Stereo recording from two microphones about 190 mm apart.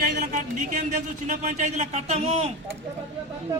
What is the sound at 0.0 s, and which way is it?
Speech, 40° right (ahead or behind).